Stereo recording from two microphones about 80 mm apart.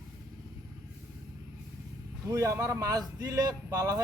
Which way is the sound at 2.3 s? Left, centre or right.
Right.